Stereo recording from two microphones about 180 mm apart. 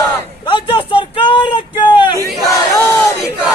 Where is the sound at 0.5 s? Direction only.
25° left (ahead or behind).